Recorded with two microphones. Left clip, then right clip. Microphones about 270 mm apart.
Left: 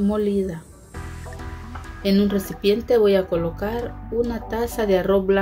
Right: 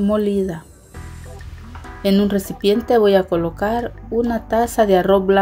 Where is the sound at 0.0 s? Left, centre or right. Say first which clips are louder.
Right 4 dB; centre.